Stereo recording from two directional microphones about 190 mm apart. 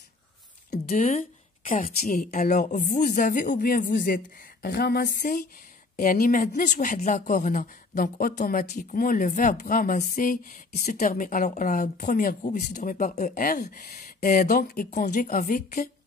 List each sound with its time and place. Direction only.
0.8 s speech: 40° left (ahead or behind)